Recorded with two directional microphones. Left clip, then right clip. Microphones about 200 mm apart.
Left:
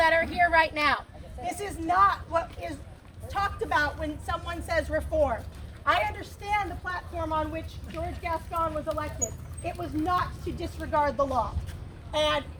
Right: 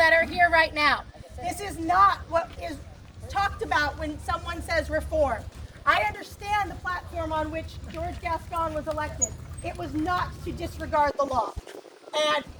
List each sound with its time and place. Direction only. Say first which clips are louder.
0.0 s a woman's voice: right 3 dB; centre (ahead or behind)
5.8 s a woman's voice: right 2 dB; 20° right (ahead or behind)
6.4 s speech: right 2 dB; 40° right (ahead or behind); by 10.5 s 55° right (ahead or behind)
11.2 s speech: right 1 dB; 5° right (ahead or behind)